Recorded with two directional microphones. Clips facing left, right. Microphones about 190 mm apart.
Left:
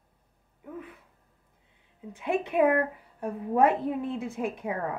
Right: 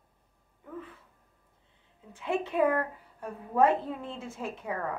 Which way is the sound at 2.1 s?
15° left (ahead or behind).